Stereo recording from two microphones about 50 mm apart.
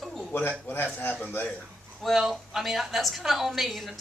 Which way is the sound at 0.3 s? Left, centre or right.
Left.